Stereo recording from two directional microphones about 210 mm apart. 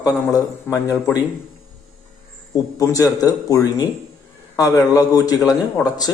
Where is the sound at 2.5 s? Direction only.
15° left (ahead or behind).